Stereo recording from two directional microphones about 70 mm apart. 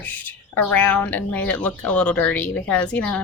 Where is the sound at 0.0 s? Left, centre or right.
Left.